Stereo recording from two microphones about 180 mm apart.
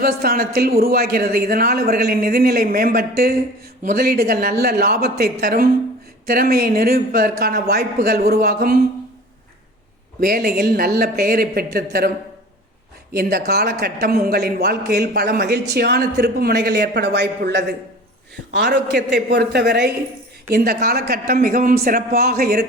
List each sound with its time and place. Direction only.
0.0 s a man's voice: 60° right (ahead or behind)
10.2 s a man's voice: 60° right (ahead or behind)
13.1 s a man's voice: 60° right (ahead or behind)